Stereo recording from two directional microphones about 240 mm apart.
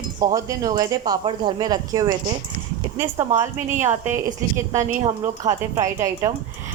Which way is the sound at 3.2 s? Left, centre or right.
Centre.